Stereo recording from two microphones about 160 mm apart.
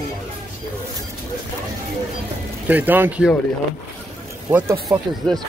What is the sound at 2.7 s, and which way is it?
Speech, 10° right (ahead or behind).